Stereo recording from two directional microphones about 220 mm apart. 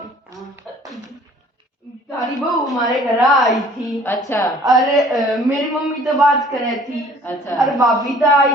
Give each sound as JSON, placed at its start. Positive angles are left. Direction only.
{"t": 2.3, "sound": "a man's voice", "side_deg": 0}
{"t": 4.3, "sound": "a woman's voice", "side_deg": 15}
{"t": 4.7, "sound": "a man's voice", "side_deg": 0}